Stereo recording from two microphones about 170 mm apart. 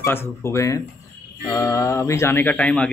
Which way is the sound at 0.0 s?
15° left (ahead or behind).